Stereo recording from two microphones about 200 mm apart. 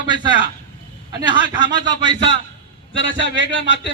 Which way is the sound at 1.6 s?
20° right (ahead or behind).